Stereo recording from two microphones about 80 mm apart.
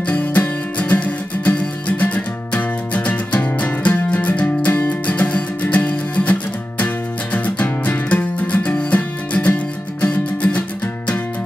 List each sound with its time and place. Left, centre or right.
0.0 s music: centre
7.3 s music: centre